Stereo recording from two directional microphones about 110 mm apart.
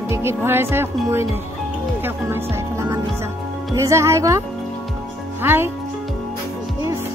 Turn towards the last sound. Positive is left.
turn(degrees=-30)  # may be behind; listen again after turning